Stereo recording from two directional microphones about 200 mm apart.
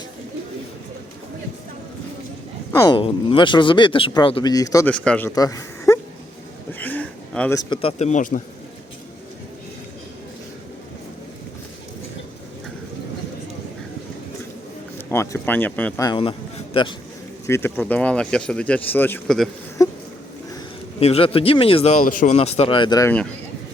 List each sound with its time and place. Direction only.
2.7 s speech: 20° left (ahead or behind)
5.3 s a sound: 15° left (ahead or behind)
7.5 s speech: 20° left (ahead or behind); by 8.4 s 40° left (ahead or behind)
14.9 s speech: 10° left (ahead or behind)
16.0 s speech: 25° left (ahead or behind)
17.4 s speech: 10° left (ahead or behind)
19.8 s a sound: 15° left (ahead or behind)
21.0 s speech: 30° left (ahead or behind)